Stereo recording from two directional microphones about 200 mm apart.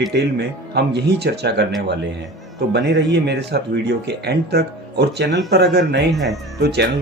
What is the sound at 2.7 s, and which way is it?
Speech, 60° right (ahead or behind).